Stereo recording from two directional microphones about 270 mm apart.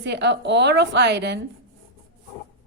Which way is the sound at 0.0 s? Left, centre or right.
Right.